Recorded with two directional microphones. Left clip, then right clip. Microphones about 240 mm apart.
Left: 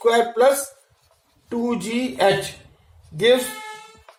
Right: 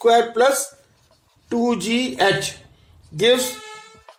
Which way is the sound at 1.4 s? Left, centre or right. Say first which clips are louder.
Right 4 dB; right.